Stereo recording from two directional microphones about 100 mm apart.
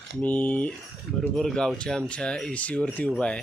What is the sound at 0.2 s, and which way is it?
Speech, 15° left (ahead or behind).